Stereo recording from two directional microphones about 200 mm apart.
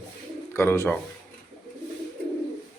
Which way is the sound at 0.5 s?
10° left (ahead or behind).